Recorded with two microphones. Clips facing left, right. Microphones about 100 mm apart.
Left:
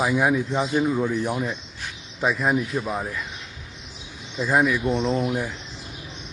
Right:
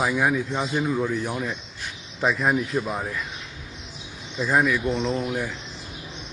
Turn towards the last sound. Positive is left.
turn(degrees=15)  # may be behind; listen again after turning